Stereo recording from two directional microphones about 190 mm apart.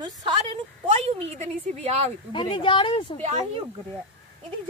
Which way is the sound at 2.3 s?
25° left (ahead or behind).